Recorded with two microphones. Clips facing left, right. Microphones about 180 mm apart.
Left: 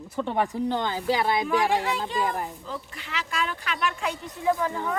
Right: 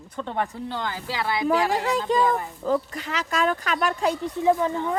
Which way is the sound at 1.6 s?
40° right (ahead or behind).